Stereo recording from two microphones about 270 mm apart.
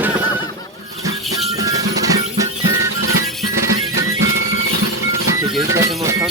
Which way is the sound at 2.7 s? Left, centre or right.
Right.